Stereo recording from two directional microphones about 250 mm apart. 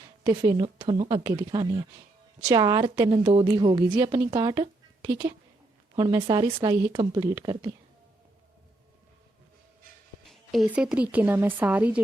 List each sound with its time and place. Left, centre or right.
0.3 s a woman's voice: centre
10.2 s speech: centre